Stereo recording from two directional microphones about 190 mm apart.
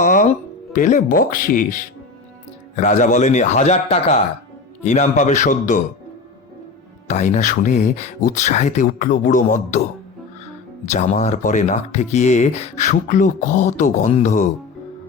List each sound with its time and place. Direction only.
0.0 s music: 45° left (ahead or behind)
2.7 s speech: 40° left (ahead or behind)
7.1 s speech: 40° left (ahead or behind)
10.8 s speech: 40° left (ahead or behind)